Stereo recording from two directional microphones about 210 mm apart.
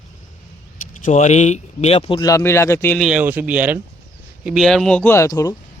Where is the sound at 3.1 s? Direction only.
10° right (ahead or behind).